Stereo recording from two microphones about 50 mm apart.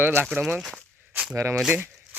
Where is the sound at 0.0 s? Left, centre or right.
Right.